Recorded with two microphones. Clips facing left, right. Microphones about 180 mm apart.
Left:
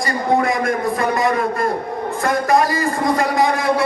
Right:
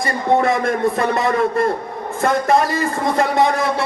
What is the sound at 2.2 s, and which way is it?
Speech, 25° right (ahead or behind).